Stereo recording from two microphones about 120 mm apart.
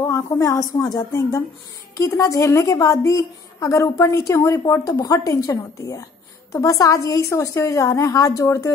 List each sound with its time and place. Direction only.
0.0 s a woman's voice: 25° left (ahead or behind)